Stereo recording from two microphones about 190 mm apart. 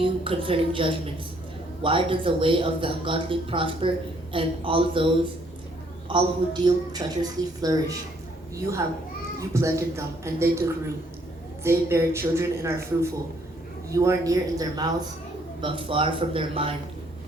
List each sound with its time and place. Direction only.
0.0 s speech: 30° right (ahead or behind)
9.4 s a woman's voice: 15° right (ahead or behind)